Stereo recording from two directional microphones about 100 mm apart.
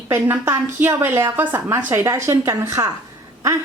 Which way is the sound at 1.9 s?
30° right (ahead or behind).